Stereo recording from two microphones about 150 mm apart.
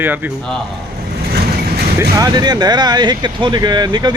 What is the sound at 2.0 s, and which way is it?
Speech, 25° right (ahead or behind).